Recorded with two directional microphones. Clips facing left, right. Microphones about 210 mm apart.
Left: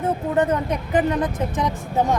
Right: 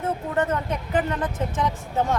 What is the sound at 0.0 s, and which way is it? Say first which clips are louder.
Speech: left 4 dB; 15° left (ahead or behind).